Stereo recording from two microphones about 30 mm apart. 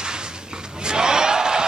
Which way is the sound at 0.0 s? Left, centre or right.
Right.